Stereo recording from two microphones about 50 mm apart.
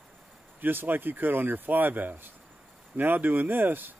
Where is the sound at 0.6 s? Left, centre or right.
Right.